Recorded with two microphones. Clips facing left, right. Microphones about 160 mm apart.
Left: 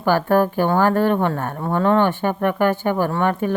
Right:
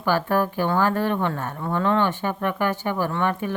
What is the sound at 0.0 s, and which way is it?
Speech, 50° left (ahead or behind).